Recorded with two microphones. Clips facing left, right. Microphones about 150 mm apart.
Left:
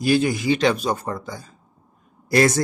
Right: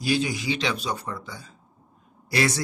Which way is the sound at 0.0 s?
55° left (ahead or behind).